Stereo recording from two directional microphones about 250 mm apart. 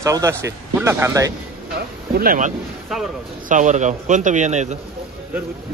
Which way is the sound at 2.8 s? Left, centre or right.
Centre.